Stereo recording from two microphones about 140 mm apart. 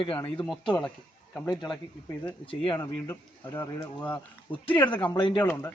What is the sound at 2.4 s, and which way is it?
Speech, 40° left (ahead or behind).